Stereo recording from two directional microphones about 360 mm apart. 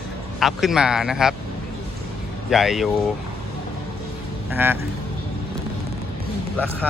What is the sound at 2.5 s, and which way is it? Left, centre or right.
Speech, centre.